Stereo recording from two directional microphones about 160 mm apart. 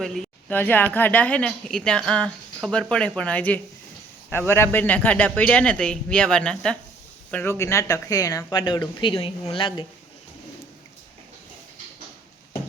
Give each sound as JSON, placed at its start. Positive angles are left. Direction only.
{"t": 0.0, "sound": "a man's voice", "side_deg": 0}